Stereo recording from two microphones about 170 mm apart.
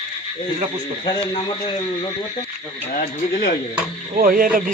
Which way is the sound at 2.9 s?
55° left (ahead or behind).